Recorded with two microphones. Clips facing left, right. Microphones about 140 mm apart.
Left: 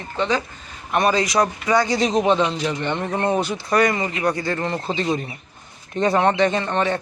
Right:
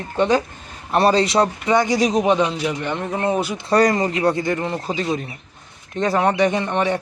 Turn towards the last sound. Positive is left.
turn(degrees=-15)  # may be behind; listen again after turning